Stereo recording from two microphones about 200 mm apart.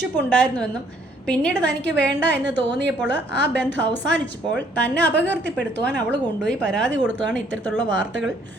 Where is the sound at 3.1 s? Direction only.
60° right (ahead or behind).